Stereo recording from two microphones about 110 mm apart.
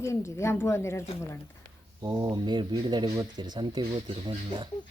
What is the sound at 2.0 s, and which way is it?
Speech, 35° right (ahead or behind).